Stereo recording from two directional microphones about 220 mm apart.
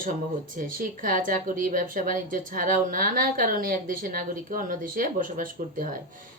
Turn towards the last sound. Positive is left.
turn(degrees=-40)  # may be behind; listen again after turning